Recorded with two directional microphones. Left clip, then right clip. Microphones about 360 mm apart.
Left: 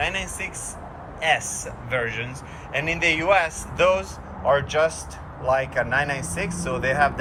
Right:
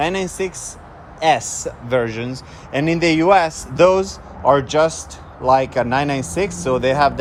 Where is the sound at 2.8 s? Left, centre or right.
Right.